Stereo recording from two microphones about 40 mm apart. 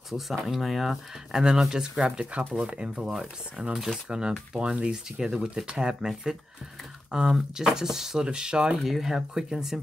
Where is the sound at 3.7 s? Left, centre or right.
Centre.